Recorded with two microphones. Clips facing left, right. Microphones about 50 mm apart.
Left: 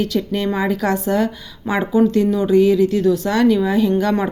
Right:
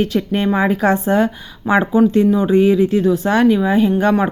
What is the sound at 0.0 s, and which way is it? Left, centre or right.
Speech, right.